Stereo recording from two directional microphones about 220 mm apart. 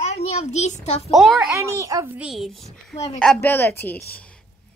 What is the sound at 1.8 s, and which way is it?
Speech, 15° right (ahead or behind).